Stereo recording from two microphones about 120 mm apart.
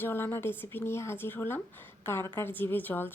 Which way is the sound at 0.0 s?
20° left (ahead or behind).